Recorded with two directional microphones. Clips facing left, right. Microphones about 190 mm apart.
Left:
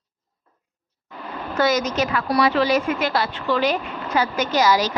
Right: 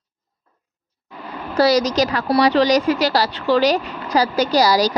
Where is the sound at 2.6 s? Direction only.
85° right.